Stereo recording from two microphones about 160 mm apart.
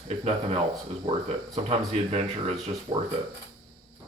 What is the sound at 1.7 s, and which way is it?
Speech, 40° right (ahead or behind).